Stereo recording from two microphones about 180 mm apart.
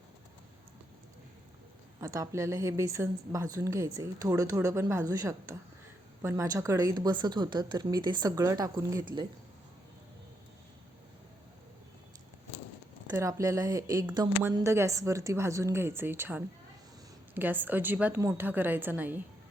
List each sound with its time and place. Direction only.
2.0 s a woman's voice: 20° right (ahead or behind)
13.1 s a woman's voice: 15° right (ahead or behind)